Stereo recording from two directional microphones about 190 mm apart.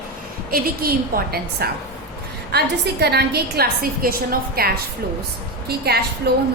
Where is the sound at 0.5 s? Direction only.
50° right (ahead or behind).